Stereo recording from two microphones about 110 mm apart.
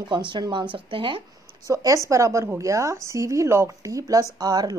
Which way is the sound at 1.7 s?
30° right (ahead or behind).